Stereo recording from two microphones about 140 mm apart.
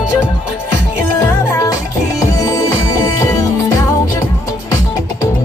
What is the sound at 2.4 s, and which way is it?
Music, 20° left (ahead or behind).